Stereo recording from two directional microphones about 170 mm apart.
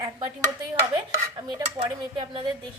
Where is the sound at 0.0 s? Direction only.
15° right (ahead or behind).